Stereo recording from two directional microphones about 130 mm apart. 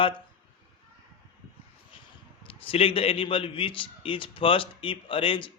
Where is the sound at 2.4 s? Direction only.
45° left (ahead or behind).